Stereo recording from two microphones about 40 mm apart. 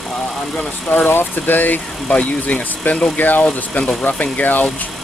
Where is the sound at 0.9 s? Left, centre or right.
Left.